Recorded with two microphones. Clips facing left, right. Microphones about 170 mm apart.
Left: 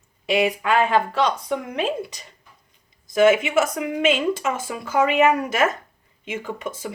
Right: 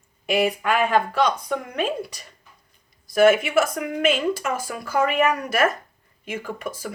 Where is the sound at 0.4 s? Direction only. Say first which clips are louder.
Left 2 dB; 25° left (ahead or behind).